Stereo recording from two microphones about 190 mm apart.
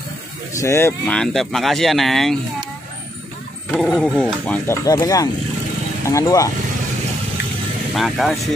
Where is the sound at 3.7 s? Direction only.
5° left (ahead or behind).